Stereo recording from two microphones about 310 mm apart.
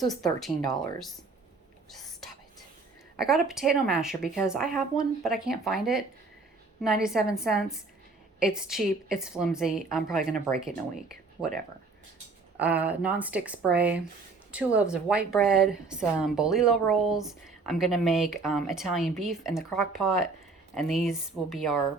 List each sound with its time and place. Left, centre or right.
0.0 s a woman's voice: centre
3.2 s a woman's voice: centre
10.2 s speech: right
10.6 s a woman's voice: centre
12.5 s a woman's voice: centre